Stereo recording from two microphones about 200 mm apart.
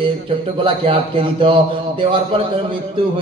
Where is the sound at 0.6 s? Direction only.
25° right (ahead or behind).